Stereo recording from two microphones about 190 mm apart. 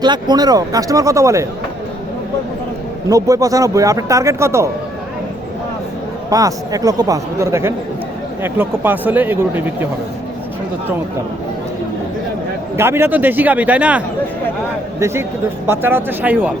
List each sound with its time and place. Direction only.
0.0 s speech: 20° right (ahead or behind)
3.1 s speech: 20° right (ahead or behind)
6.3 s speech: 20° right (ahead or behind)
12.7 s speech: 15° right (ahead or behind)